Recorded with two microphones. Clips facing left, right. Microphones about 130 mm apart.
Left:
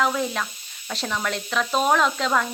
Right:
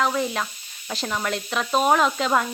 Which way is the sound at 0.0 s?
Centre (ahead or behind).